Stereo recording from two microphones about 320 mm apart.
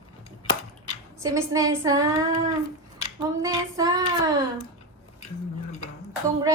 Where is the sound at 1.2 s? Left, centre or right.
Centre.